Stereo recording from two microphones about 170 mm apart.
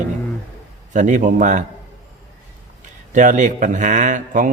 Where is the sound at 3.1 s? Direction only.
50° right (ahead or behind).